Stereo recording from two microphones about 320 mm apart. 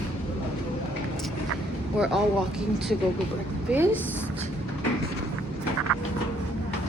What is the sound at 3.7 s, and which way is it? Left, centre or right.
Speech, centre.